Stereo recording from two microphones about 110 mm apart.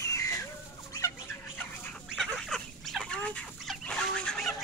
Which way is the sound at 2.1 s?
Centre (ahead or behind).